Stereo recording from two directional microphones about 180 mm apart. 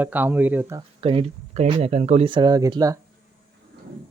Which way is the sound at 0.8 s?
30° right (ahead or behind).